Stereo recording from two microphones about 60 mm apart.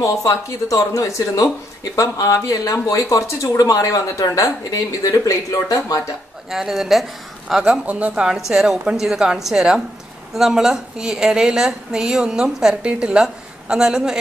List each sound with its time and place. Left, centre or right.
0.0 s speech: left
6.5 s speech: centre
7.6 s a woman's voice: centre